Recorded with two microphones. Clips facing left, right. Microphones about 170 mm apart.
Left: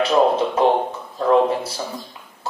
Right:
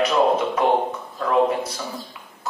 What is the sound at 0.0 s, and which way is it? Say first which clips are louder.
Speech: left 2 dB; 30° left (ahead or behind).